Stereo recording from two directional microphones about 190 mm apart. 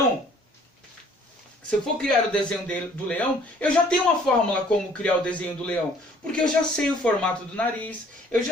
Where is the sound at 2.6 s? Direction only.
5° left (ahead or behind).